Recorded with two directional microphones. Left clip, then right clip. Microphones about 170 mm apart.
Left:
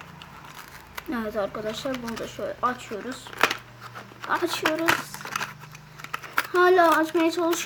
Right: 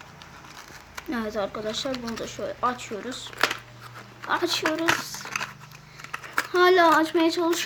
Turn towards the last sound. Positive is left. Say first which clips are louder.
# even
turn(degrees=-10)  # may be behind; listen again after turning